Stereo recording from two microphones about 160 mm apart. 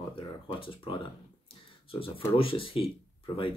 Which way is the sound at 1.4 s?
35° left (ahead or behind).